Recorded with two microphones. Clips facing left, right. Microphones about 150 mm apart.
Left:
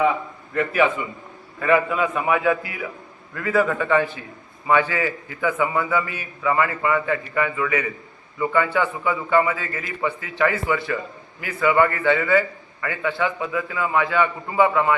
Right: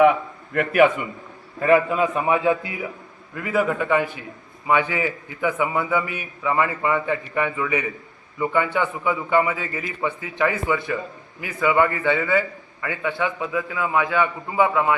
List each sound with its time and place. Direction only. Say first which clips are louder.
0.5 s a man's voice: even; 55° right (ahead or behind)
1.5 s a man's voice: right 2 dB; 35° right (ahead or behind); by 14.9 s 10° right (ahead or behind)